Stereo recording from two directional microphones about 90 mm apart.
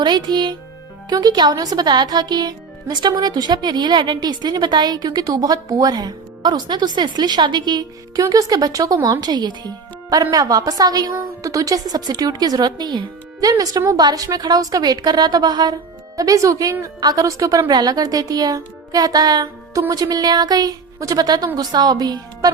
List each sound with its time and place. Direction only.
0.0 s speech: 55° right (ahead or behind)